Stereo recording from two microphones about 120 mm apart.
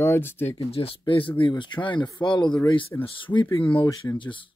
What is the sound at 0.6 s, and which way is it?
Speech, 50° left (ahead or behind).